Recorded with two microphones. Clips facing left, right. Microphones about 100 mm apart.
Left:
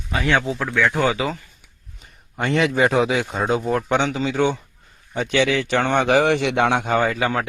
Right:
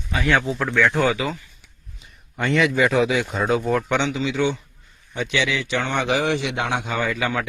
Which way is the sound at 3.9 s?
40° left (ahead or behind).